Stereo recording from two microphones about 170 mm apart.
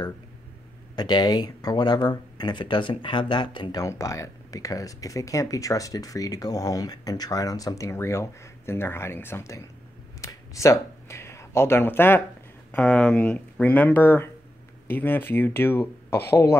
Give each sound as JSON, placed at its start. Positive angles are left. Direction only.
{"t": 0.9, "sound": "speech", "side_deg": 25}